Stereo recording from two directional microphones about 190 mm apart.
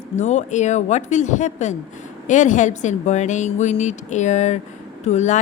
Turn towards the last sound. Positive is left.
turn(degrees=40)  # may be behind; listen again after turning